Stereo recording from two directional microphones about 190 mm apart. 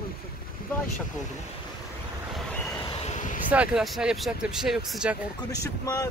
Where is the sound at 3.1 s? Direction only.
40° left (ahead or behind).